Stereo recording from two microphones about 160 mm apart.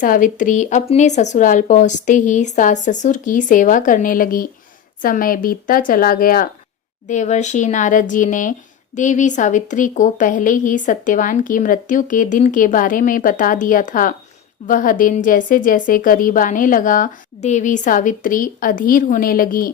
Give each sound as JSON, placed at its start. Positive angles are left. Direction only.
{"t": 0.0, "sound": "speech", "side_deg": 55}
{"t": 7.1, "sound": "speech", "side_deg": 50}